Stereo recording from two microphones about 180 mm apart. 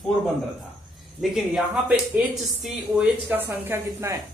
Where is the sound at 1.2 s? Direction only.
Centre (ahead or behind).